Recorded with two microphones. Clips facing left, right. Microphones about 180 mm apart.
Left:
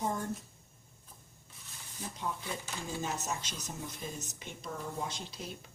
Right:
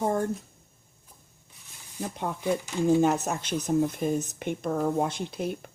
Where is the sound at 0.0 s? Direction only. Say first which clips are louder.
Right 9 dB; 50° right (ahead or behind).